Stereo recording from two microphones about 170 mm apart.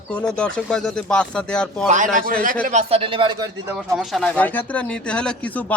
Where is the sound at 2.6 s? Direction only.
40° right (ahead or behind); by 3.8 s 20° right (ahead or behind).